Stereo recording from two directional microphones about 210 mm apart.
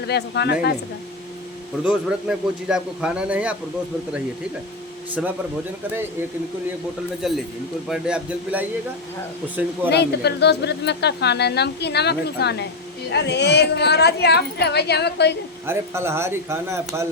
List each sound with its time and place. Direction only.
0.1 s a woman's voice: 50° left (ahead or behind)
1.8 s a man's voice: 5° right (ahead or behind)
7.2 s a man's voice: centre (ahead or behind)
9.9 s a woman's voice: 50° left (ahead or behind)
15.6 s speech: 10° right (ahead or behind)